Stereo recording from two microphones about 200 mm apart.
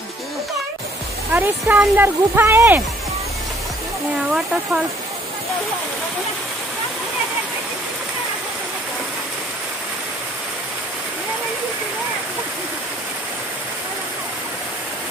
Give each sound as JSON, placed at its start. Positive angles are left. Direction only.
{"t": 1.3, "sound": "speech", "side_deg": -10}